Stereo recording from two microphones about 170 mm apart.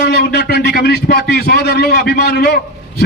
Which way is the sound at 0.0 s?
75° left (ahead or behind).